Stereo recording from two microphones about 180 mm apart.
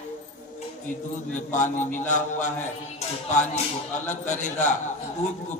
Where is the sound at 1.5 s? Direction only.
45° left (ahead or behind).